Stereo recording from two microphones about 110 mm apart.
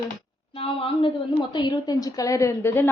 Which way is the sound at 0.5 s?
60° left (ahead or behind).